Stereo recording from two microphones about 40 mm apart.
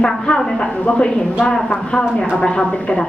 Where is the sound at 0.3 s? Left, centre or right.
Centre.